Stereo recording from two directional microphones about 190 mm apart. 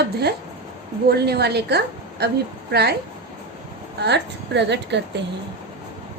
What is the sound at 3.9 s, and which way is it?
A woman's voice, 60° right (ahead or behind).